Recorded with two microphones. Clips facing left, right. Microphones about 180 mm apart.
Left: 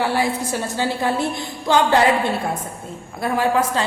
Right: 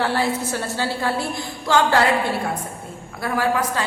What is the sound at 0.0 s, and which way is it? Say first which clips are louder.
A woman's voice: left 1 dB; 15° left (ahead or behind).